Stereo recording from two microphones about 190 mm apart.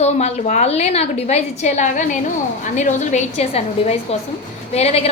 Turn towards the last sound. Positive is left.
turn(degrees=35)  # may be behind; listen again after turning